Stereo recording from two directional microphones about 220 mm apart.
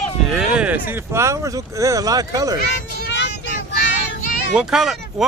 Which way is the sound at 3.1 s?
55° left (ahead or behind).